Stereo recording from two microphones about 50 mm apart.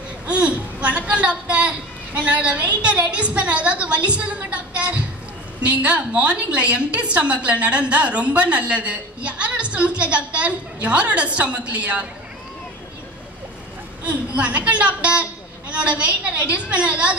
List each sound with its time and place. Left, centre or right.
0.3 s a woman's voice: right
14.0 s a woman's voice: right